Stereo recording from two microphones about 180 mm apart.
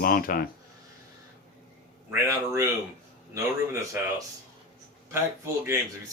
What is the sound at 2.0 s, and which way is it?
A man's voice, 15° right (ahead or behind).